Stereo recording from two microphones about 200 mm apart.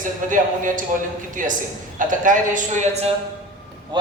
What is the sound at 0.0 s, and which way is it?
A man's voice, 40° right (ahead or behind).